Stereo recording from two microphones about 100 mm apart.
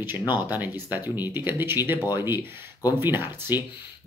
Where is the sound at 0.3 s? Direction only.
20° right (ahead or behind).